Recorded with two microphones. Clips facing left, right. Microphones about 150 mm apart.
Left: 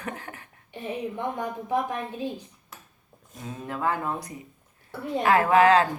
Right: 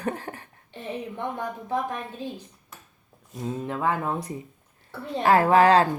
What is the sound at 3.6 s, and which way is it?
Speech, 20° right (ahead or behind).